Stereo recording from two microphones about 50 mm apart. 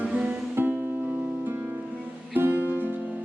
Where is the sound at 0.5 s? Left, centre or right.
Right.